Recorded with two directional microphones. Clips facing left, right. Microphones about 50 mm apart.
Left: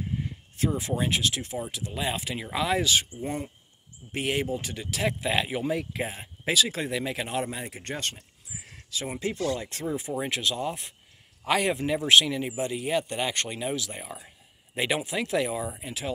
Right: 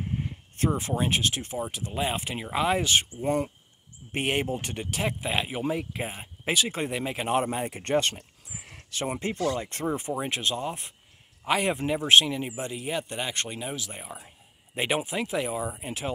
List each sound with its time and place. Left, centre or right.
0.6 s speech: right
3.2 s speech: right
4.1 s speech: right
4.9 s speech: right
8.2 s a sound: right
9.2 s speech: right
11.4 s speech: centre
11.9 s speech: right
12.7 s speech: centre
15.8 s speech: right